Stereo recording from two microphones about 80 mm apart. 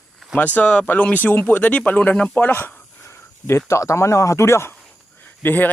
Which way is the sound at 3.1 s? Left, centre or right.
Left.